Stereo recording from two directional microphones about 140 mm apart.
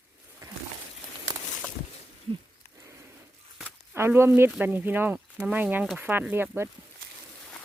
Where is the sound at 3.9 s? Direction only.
20° right (ahead or behind).